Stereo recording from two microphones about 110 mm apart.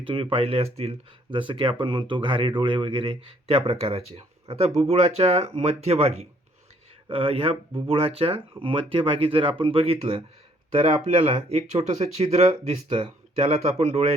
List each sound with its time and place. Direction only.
0.0 s speech: 50° right (ahead or behind); by 6.2 s 70° right (ahead or behind)
7.1 s speech: 60° right (ahead or behind); by 12.5 s 75° right (ahead or behind)
13.5 s speech: 80° right